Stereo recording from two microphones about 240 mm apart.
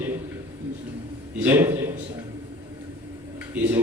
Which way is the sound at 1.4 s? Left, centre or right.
Centre.